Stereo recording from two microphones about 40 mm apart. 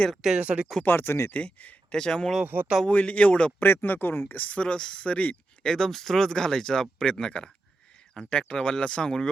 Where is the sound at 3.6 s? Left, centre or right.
Left.